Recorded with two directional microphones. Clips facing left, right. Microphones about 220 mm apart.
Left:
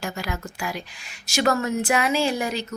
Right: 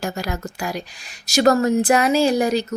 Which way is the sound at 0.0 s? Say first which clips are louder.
Right 4 dB; 40° right (ahead or behind).